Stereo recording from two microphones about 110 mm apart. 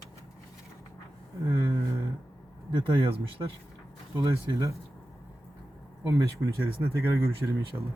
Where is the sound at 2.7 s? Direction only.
55° right (ahead or behind).